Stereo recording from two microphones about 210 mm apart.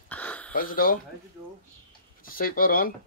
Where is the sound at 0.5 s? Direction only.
40° left (ahead or behind).